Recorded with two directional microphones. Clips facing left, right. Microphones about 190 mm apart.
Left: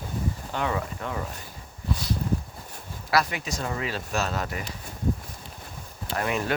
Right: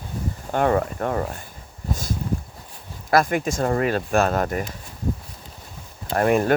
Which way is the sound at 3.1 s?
50° right (ahead or behind).